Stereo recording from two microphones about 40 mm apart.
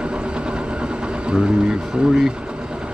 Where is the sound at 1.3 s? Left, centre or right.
Centre.